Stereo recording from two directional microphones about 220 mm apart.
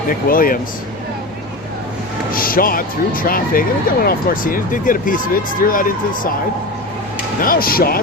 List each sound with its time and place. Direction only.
0.3 s speech: 40° left (ahead or behind)
2.3 s speech: 40° left (ahead or behind)
7.4 s speech: 40° left (ahead or behind)